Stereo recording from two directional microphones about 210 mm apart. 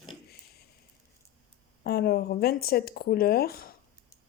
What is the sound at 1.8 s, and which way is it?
Speech, 45° left (ahead or behind).